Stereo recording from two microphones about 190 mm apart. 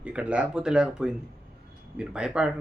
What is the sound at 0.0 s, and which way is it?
Speech, 5° right (ahead or behind).